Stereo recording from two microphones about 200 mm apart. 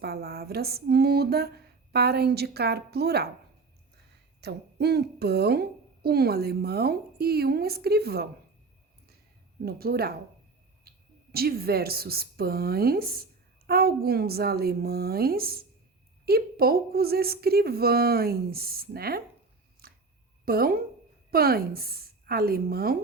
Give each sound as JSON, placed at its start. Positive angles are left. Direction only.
{"t": 0.0, "sound": "a woman's voice", "side_deg": -50}
{"t": 4.4, "sound": "a woman's voice", "side_deg": -55}
{"t": 9.6, "sound": "a woman's voice", "side_deg": -50}
{"t": 19.8, "sound": "a sound", "side_deg": -50}
{"t": 20.4, "sound": "a woman's voice", "side_deg": -50}